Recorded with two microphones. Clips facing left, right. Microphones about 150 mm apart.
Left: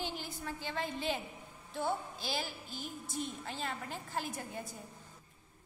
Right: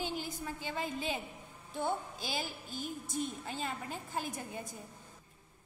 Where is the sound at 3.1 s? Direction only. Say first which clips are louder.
Right 1 dB; 15° right (ahead or behind).